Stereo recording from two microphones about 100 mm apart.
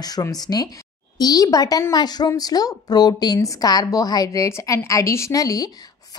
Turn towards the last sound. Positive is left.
turn(degrees=35)  # may be behind; listen again after turning